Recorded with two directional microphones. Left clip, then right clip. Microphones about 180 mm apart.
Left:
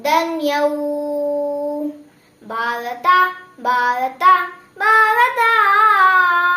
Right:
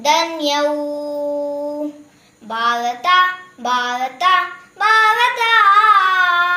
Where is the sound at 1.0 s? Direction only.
20° left (ahead or behind).